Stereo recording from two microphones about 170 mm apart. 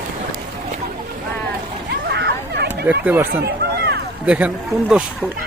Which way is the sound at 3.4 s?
70° right (ahead or behind).